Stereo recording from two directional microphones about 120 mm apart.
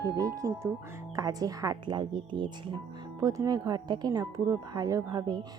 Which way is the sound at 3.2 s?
30° right (ahead or behind).